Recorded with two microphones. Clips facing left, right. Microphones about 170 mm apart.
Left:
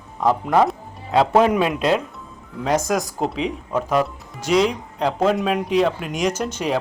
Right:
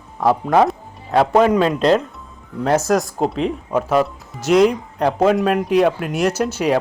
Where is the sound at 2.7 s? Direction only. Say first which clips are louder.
Right 4 dB; centre (ahead or behind).